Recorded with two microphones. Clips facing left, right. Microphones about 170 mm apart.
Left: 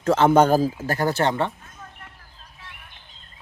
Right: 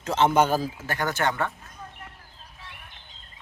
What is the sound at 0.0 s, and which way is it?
Speech, 55° left (ahead or behind).